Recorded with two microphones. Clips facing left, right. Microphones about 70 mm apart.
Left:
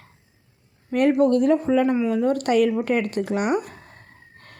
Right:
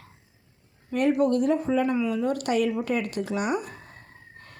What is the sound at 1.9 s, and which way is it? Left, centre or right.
Speech, left.